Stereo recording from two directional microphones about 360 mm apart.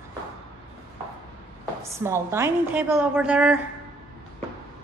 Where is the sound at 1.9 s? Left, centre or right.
Centre.